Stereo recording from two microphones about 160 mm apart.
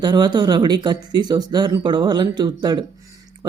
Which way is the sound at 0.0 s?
25° right (ahead or behind).